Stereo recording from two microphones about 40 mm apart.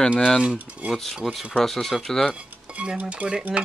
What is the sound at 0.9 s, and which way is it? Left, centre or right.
Speech, centre.